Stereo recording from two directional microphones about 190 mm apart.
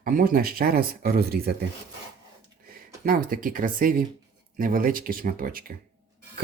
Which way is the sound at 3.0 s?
50° right (ahead or behind).